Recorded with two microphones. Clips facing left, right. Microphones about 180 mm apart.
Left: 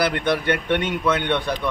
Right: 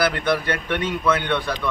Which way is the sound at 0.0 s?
20° left (ahead or behind).